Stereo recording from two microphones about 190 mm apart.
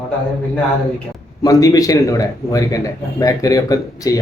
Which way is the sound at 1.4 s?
20° left (ahead or behind).